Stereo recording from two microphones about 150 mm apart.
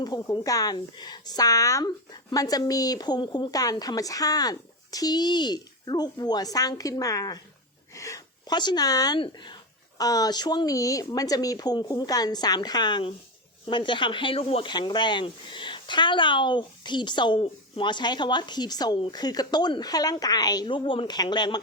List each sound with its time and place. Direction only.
0.0 s a woman's voice: 25° left (ahead or behind)